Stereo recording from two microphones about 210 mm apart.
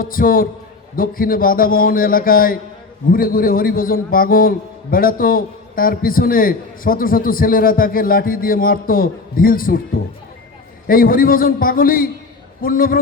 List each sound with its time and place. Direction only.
0.0 s a man's voice: 40° left (ahead or behind)
10.8 s a man's voice: 45° left (ahead or behind)